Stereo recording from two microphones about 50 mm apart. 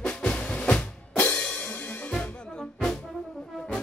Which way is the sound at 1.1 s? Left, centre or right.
Left.